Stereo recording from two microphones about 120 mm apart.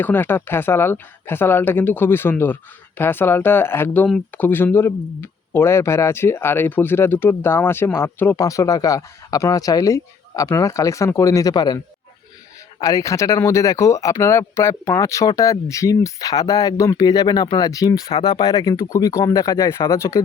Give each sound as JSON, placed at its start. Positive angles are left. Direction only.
{"t": 0.0, "sound": "speech", "side_deg": 15}
{"t": 12.8, "sound": "speech", "side_deg": 25}